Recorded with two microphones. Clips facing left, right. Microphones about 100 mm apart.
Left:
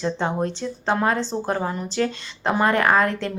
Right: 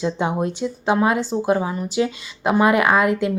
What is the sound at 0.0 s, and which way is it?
Speech, 10° right (ahead or behind).